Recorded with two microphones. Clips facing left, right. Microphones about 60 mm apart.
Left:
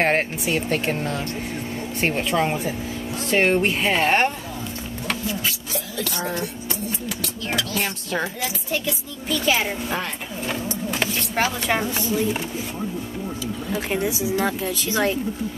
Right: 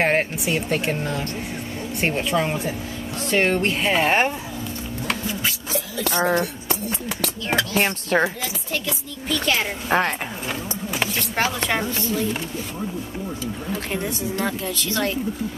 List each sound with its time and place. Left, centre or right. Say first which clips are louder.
0.0 s speech: even; centre
6.0 s speech: right 6 dB; right
6.9 s a sound: right 2 dB; right
7.5 s speech: right 5 dB; right
8.7 s speech: left 1 dB; centre
9.8 s speech: right 7 dB; right
10.5 s a sound: left 5 dB; centre
11.3 s speech: left 1 dB; centre
13.7 s speech: left 4 dB; centre